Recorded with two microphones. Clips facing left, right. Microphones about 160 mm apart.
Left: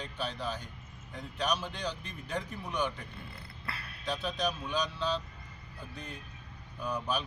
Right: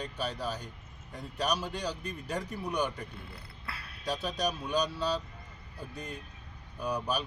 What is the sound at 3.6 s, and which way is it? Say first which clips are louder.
Speech: right 1 dB; centre (ahead or behind).